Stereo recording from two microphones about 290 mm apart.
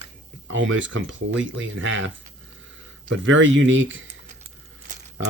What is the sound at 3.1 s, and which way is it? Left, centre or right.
Speech, right.